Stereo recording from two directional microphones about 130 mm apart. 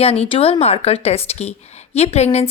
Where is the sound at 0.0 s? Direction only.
50° left (ahead or behind).